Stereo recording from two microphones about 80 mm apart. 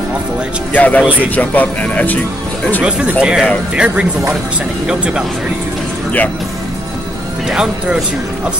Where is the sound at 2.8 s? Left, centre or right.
Centre.